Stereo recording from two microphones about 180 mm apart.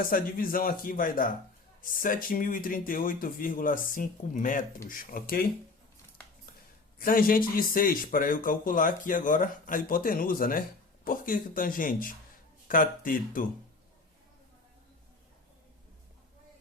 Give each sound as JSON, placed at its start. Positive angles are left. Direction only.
{"t": 0.1, "sound": "a man's voice", "side_deg": 50}
{"t": 7.0, "sound": "a man's voice", "side_deg": 50}